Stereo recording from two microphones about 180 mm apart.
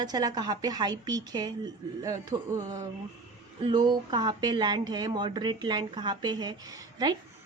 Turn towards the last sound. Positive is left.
turn(degrees=-20)  # may be behind; listen again after turning